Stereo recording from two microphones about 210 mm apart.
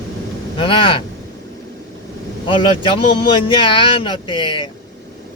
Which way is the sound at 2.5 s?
25° left (ahead or behind).